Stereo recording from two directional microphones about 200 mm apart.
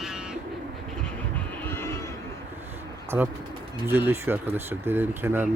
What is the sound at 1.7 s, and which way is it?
Music, 10° left (ahead or behind).